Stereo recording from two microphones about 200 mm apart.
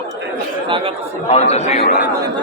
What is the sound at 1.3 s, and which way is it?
Speech, 30° left (ahead or behind).